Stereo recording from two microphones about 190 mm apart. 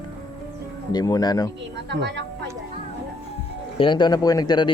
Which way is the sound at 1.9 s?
65° right (ahead or behind).